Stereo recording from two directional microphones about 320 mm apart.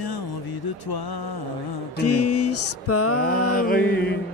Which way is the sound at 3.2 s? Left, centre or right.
Left.